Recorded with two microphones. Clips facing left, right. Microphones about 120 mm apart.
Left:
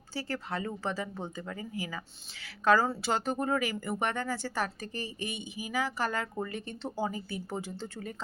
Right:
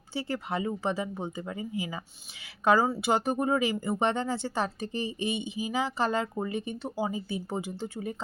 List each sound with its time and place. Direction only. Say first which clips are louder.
0.1 s speech: right 3 dB; 20° right (ahead or behind)